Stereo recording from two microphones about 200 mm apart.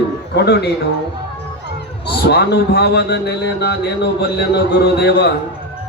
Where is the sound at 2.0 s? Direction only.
55° left (ahead or behind).